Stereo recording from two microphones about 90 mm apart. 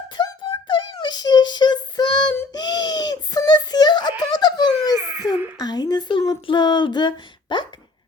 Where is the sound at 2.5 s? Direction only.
50° left (ahead or behind).